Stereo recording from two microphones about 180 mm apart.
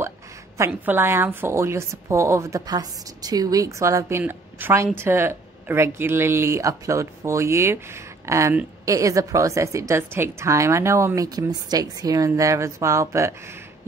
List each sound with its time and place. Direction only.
0.6 s speech: 10° right (ahead or behind)